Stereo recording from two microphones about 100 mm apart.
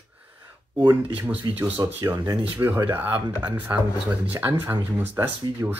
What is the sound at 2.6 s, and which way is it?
Speech, 20° right (ahead or behind).